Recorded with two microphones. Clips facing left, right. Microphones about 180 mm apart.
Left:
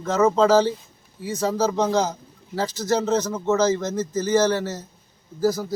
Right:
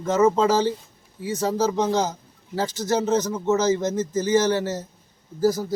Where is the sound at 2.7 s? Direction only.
20° right (ahead or behind).